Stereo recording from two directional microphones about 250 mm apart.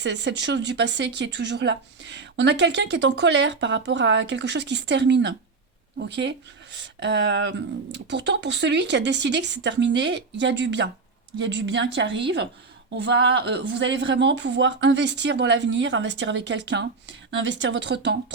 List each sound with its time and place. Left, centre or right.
0.0 s speech: right
13.0 s speech: right